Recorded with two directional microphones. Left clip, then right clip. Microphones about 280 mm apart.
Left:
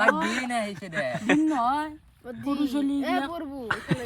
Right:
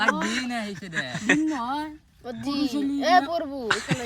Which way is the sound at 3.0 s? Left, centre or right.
Right.